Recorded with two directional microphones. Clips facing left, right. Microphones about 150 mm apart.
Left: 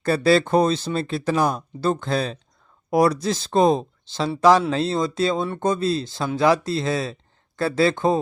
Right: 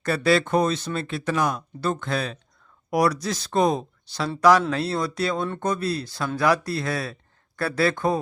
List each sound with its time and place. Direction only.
0.0 s speech: 30° left (ahead or behind)